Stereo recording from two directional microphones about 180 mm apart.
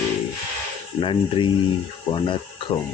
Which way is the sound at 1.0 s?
30° left (ahead or behind).